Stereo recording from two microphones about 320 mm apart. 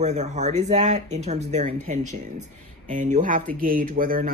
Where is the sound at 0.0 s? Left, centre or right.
Right.